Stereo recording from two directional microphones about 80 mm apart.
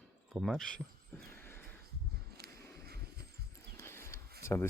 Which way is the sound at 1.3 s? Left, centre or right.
Left.